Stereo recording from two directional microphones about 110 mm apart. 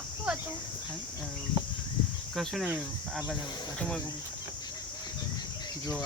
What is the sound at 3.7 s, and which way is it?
Speech, 10° left (ahead or behind).